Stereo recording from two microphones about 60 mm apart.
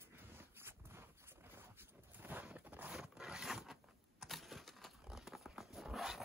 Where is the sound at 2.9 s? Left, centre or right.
Centre.